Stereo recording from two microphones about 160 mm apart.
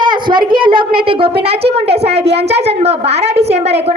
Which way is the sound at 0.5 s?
30° right (ahead or behind).